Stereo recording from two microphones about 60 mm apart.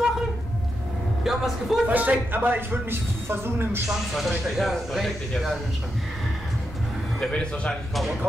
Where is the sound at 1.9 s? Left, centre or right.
Right.